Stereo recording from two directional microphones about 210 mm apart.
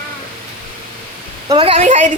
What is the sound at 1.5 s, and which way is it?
Speech, 25° right (ahead or behind).